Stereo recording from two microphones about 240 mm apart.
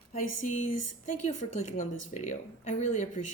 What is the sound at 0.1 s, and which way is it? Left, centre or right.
Speech, left.